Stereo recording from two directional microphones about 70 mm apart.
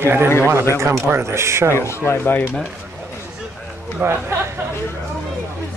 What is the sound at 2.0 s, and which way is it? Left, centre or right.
Speech, left.